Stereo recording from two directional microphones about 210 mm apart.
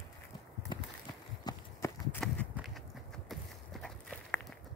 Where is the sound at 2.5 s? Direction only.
Centre (ahead or behind).